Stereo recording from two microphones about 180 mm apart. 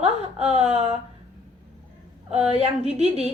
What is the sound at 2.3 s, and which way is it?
Speech, 40° right (ahead or behind).